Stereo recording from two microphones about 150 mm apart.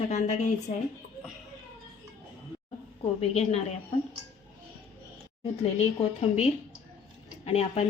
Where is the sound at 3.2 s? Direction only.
45° left (ahead or behind).